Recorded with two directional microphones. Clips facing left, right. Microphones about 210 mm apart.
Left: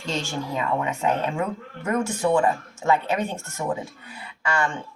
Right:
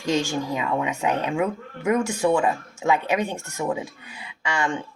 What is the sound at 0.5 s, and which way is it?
A woman's voice, 15° right (ahead or behind).